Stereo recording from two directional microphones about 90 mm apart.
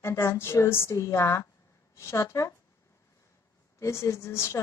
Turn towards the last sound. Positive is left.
turn(degrees=30)  # may be behind; listen again after turning